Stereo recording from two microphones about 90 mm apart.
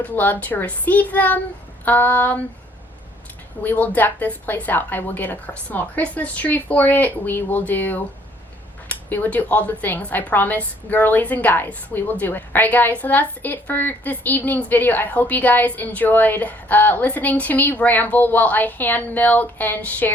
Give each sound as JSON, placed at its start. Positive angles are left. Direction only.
{"t": 0.0, "sound": "a woman's voice", "side_deg": 20}
{"t": 3.6, "sound": "a woman's voice", "side_deg": 20}